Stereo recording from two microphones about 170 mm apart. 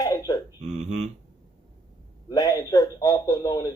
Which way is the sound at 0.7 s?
40° right (ahead or behind).